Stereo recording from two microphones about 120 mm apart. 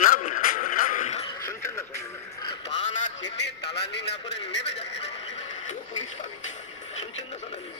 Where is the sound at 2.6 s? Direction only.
80° left.